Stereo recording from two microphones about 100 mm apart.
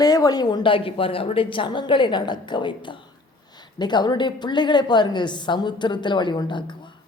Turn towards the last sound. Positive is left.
turn(degrees=50)  # may be behind; listen again after turning